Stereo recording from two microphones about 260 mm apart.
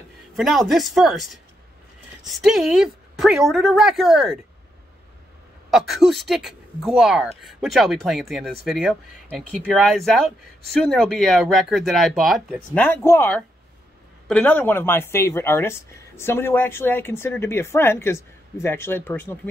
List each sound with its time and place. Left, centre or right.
0.4 s speech: centre
5.7 s speech: centre